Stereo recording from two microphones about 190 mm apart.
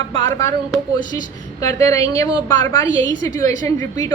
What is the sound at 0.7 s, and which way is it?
Speech, 20° left (ahead or behind).